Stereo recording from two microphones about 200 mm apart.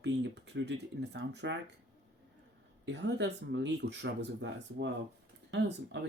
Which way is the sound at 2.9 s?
60° right (ahead or behind).